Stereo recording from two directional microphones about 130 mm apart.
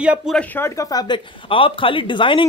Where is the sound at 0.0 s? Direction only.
10° right (ahead or behind).